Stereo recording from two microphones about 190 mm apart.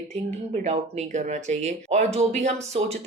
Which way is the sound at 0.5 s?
35° right (ahead or behind).